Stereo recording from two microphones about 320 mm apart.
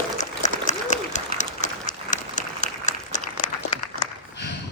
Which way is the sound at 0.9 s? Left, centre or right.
Left.